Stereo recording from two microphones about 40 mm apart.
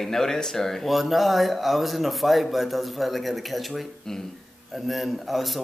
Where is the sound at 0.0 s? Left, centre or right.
Centre.